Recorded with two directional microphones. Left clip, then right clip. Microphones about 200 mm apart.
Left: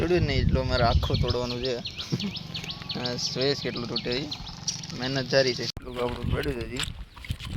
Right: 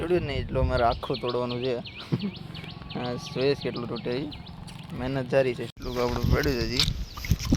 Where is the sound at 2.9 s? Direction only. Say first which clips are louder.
Left 2 dB; 10° right (ahead or behind).